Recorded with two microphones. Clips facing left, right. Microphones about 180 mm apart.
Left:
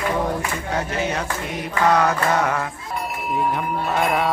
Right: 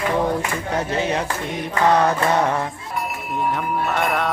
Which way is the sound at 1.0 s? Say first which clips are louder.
Right 3 dB; 30° right (ahead or behind).